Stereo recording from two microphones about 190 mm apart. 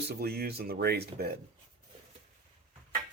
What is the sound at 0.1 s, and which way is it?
Speech, 55° right (ahead or behind).